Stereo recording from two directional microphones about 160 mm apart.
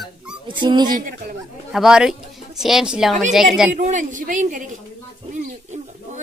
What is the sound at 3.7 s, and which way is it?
Speech, 50° right (ahead or behind).